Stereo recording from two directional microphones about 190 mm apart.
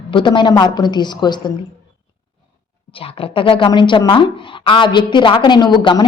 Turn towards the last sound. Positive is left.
turn(degrees=25)  # may be behind; listen again after turning